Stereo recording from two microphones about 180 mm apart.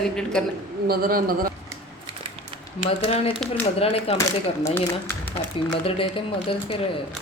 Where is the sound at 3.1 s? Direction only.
35° left (ahead or behind).